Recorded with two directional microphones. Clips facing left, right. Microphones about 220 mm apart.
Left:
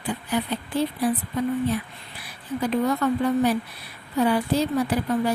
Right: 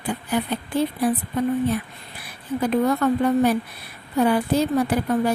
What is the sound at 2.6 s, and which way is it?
Speech, 50° right (ahead or behind).